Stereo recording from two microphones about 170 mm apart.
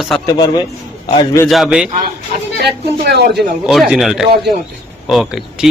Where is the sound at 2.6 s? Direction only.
75° right (ahead or behind).